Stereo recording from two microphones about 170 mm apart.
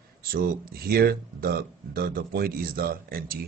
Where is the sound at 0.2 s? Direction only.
60° right (ahead or behind).